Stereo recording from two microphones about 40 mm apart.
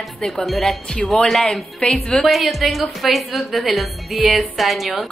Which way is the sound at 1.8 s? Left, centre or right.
Left.